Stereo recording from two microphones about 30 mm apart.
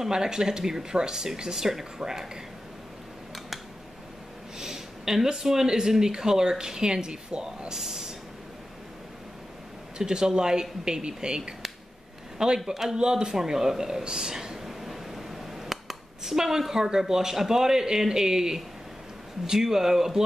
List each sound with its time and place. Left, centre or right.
0.0 s speech: right
4.6 s speech: centre
9.9 s speech: right
12.6 s speech: centre
12.9 s speech: right
14.0 s a sound: right
17.0 s speech: centre